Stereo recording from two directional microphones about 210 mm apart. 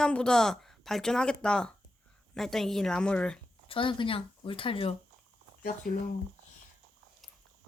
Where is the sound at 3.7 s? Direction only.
25° left (ahead or behind).